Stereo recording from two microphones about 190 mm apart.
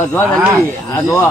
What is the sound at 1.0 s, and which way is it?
Speech, 15° left (ahead or behind).